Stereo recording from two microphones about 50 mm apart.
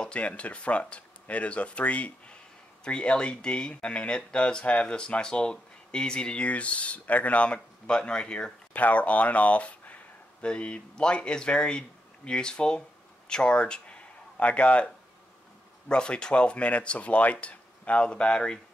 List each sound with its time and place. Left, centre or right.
0.0 s speech: left
8.7 s speech: left
15.9 s speech: centre